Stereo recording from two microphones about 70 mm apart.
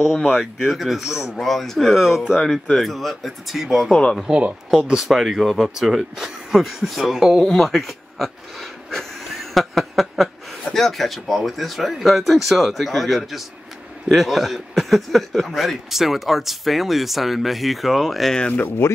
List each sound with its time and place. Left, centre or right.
0.0 s a man's voice: centre
3.9 s speech: centre
4.2 s speech: centre
4.8 s a man's voice: centre
18.6 s speech: left